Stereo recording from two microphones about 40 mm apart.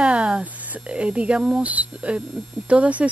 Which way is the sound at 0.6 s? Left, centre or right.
Right.